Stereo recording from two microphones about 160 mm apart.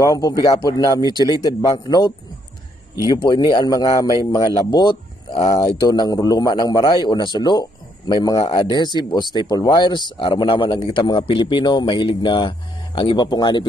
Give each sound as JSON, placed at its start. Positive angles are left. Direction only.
{"t": 0.0, "sound": "speech", "side_deg": 20}
{"t": 3.3, "sound": "speech", "side_deg": 25}